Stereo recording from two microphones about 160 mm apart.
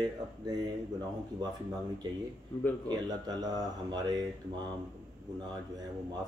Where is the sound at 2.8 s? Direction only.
25° right (ahead or behind).